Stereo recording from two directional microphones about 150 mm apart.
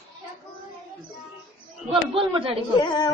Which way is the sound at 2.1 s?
35° right (ahead or behind).